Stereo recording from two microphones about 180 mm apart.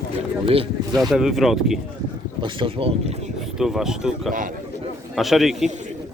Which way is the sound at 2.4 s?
30° right (ahead or behind).